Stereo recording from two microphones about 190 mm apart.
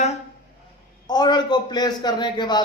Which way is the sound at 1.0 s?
20° left (ahead or behind).